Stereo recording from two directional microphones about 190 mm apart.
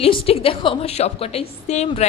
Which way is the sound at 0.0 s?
30° left (ahead or behind).